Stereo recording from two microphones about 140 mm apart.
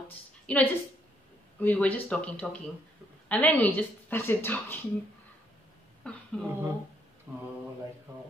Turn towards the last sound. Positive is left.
turn(degrees=-20)  # may be behind; listen again after turning